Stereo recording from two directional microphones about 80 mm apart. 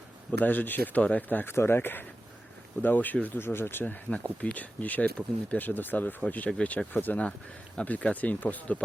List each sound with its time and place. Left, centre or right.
0.4 s speech: left